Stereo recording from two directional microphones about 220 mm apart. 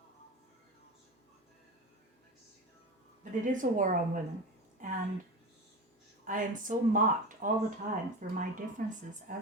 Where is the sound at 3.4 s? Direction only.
35° right (ahead or behind).